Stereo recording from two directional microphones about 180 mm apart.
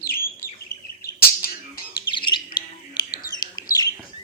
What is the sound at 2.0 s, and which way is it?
Bird, 25° left (ahead or behind).